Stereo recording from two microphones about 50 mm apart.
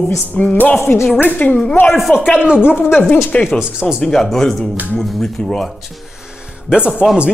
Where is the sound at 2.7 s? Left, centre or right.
Left.